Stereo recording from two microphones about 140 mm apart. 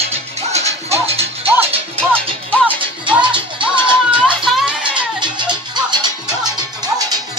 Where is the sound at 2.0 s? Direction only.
10° left (ahead or behind).